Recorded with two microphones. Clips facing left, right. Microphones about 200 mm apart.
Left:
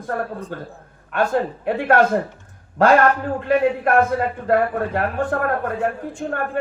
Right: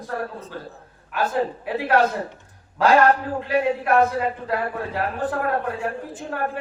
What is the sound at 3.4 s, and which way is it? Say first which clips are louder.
A man's voice: left 4 dB; 50° left (ahead or behind).